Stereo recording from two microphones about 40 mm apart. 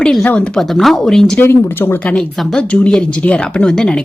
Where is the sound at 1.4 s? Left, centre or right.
Left.